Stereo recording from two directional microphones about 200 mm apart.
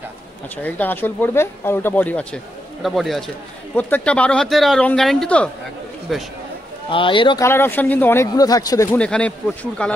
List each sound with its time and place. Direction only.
0.6 s speech: 10° left (ahead or behind)
6.9 s speech: 25° left (ahead or behind)
7.4 s speech: 10° left (ahead or behind)
8.9 s speech: 5° left (ahead or behind)